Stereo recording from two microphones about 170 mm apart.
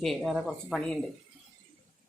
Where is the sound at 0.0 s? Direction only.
Centre (ahead or behind).